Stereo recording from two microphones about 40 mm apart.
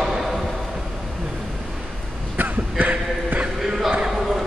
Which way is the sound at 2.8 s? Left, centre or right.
Right.